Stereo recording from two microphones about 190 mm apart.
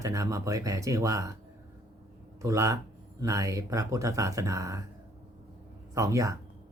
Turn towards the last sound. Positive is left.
turn(degrees=-15)  # may be behind; listen again after turning